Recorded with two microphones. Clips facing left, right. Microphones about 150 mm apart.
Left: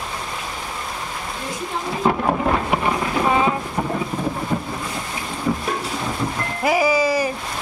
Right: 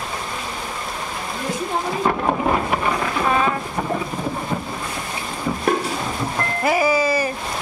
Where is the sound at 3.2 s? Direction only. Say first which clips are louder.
Left 1 dB; 15° left (ahead or behind).